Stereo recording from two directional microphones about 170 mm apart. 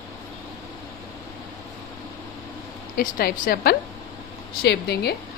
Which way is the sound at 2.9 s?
60° left (ahead or behind).